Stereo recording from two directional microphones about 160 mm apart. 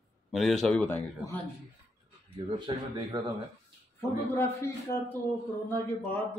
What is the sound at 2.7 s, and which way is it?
Speech, 35° right (ahead or behind).